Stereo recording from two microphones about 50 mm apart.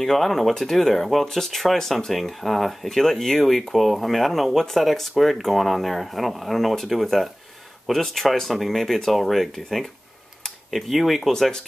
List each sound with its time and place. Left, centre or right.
0.0 s speech: centre
11.3 s speech: centre